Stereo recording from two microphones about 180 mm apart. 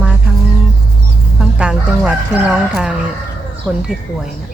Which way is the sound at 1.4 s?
5° right (ahead or behind).